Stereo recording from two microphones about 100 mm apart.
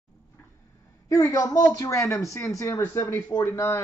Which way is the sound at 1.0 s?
35° left (ahead or behind).